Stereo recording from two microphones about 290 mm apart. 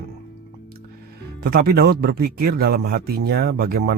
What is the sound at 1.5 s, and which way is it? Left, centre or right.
Speech, right.